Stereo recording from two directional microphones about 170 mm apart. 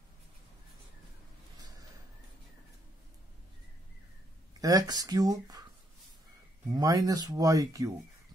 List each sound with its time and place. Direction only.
4.6 s speech: 20° right (ahead or behind)
6.7 s speech: 20° right (ahead or behind)